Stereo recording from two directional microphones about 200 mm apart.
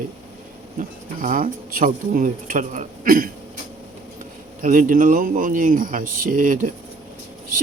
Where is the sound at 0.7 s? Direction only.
45° right (ahead or behind).